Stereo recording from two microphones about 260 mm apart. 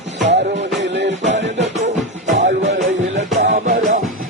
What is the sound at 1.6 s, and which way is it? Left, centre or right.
Music, right.